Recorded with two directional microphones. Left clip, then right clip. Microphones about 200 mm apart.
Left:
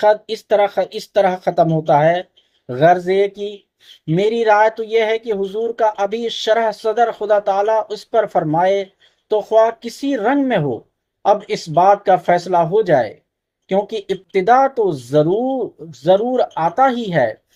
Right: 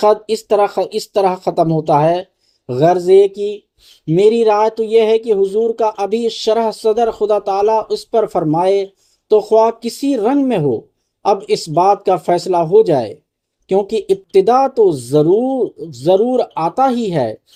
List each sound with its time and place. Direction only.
0.0 s speech: 45° right (ahead or behind)